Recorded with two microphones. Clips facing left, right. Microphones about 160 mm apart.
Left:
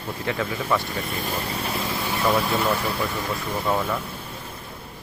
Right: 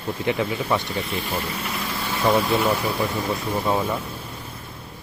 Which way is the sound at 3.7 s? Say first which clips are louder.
Right 1 dB; 15° right (ahead or behind).